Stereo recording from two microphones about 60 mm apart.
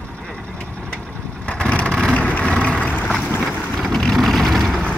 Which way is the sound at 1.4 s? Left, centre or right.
Centre.